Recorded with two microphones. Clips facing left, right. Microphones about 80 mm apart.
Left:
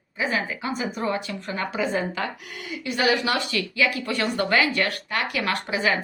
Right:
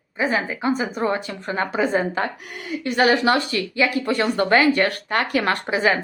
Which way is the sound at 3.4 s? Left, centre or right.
Right.